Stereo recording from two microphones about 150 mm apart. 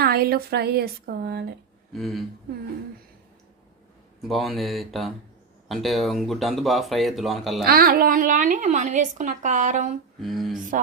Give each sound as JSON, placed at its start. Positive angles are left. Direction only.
{"t": 0.0, "sound": "speech", "side_deg": -90}
{"t": 1.9, "sound": "speech", "side_deg": 0}
{"t": 4.2, "sound": "speech", "side_deg": 0}
{"t": 7.6, "sound": "a woman's voice", "side_deg": -85}
{"t": 10.2, "sound": "speech", "side_deg": 0}